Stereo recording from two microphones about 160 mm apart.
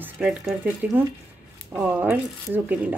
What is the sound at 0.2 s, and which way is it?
A woman's voice, centre (ahead or behind).